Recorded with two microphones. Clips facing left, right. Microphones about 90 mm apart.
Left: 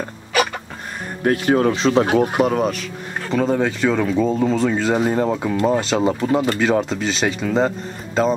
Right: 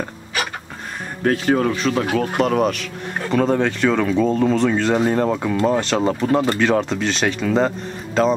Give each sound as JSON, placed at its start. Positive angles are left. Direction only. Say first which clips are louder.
{"t": 1.6, "sound": "speech", "louder": "left 3 dB", "side_deg": 20}
{"t": 2.3, "sound": "speech", "louder": "even", "side_deg": 5}